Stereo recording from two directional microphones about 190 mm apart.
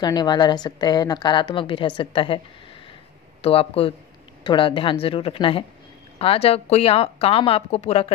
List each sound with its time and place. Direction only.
0.0 s a woman's voice: 20° left (ahead or behind)
3.4 s a woman's voice: 30° left (ahead or behind)